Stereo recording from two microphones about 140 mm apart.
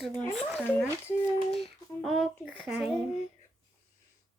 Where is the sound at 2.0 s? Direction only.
Centre (ahead or behind).